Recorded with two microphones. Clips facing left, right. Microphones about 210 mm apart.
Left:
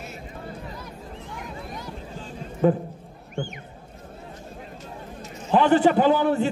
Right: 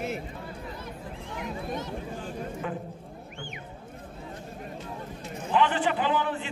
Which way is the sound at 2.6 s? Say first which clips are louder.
Left 16 dB; 40° left (ahead or behind).